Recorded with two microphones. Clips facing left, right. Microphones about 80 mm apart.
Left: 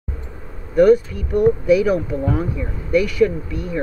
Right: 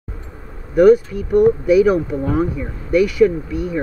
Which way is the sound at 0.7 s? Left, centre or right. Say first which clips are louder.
Right 2 dB; centre.